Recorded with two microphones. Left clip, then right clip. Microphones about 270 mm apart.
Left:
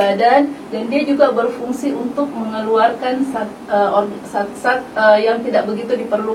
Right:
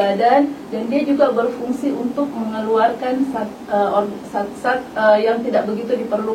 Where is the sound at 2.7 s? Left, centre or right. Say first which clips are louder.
Left 2 dB; centre.